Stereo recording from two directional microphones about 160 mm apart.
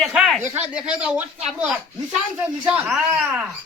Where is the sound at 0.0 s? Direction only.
Centre (ahead or behind).